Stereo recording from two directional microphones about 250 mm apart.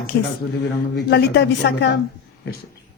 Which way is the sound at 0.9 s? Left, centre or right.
Left.